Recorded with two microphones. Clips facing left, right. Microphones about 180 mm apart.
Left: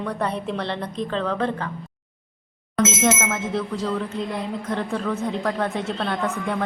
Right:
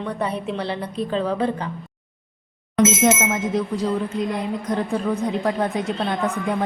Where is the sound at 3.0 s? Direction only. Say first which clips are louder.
Right 3 dB; 15° right (ahead or behind).